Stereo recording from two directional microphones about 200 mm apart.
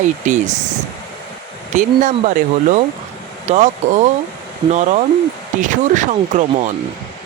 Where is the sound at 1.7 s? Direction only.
40° right (ahead or behind).